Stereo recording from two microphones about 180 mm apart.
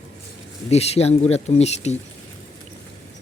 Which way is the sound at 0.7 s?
35° left (ahead or behind).